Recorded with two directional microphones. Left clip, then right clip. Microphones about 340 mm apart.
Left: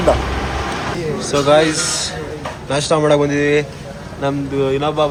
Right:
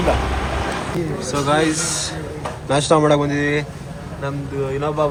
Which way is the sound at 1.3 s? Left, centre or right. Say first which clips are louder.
Left 6 dB; centre.